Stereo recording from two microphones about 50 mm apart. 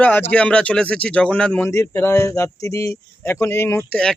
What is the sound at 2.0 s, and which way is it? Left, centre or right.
Speech, left.